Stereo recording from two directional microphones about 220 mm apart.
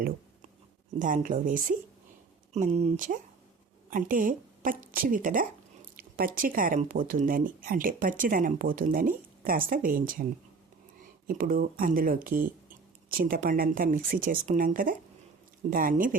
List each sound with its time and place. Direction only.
0.9 s speech: 35° right (ahead or behind)
11.3 s speech: 40° right (ahead or behind)